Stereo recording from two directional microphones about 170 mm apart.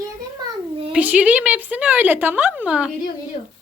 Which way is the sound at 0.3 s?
30° right (ahead or behind).